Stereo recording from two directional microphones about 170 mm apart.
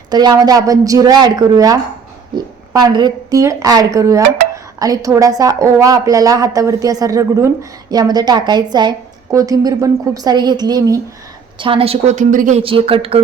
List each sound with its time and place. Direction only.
0.1 s a woman's voice: 25° right (ahead or behind); by 12.6 s 45° right (ahead or behind)
12.6 s a woman's voice: 35° right (ahead or behind)